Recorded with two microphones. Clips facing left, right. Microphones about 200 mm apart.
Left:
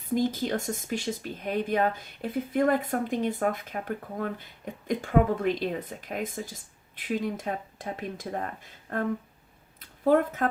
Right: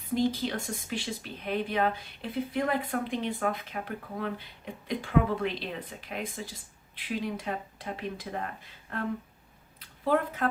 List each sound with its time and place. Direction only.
0.0 s speech: 45° left (ahead or behind)